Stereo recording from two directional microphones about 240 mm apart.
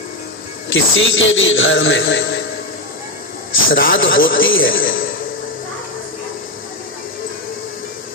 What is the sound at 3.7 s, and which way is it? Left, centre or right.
Speech, left.